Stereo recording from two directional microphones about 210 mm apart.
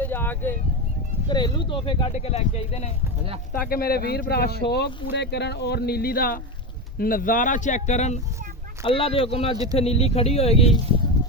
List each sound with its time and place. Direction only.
0.0 s a sound: 10° left (ahead or behind)
1.3 s speech: 20° left (ahead or behind)
3.5 s speech: 45° left (ahead or behind); by 10.7 s 30° left (ahead or behind)